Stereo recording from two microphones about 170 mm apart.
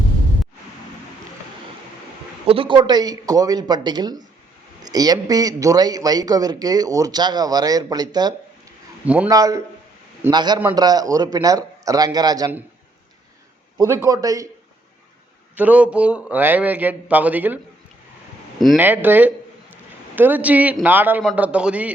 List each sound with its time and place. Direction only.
2.5 s a man's voice: 30° right (ahead or behind)
9.0 s a man's voice: 10° right (ahead or behind)
9.3 s a man's voice: 20° right (ahead or behind)
13.7 s a man's voice: 15° right (ahead or behind)
15.5 s a man's voice: 10° right (ahead or behind)
18.8 s a man's voice: 10° right (ahead or behind)